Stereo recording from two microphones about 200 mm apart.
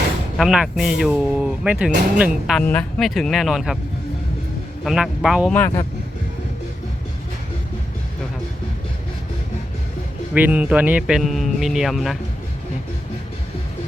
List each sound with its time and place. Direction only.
0.3 s speech: 5° right (ahead or behind)
2.6 s speech: 5° left (ahead or behind)
4.8 s speech: centre (ahead or behind)
5.5 s speech: 10° left (ahead or behind)
10.3 s speech: 10° right (ahead or behind)